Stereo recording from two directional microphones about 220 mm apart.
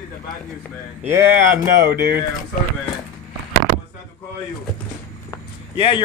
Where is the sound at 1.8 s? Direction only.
50° right (ahead or behind).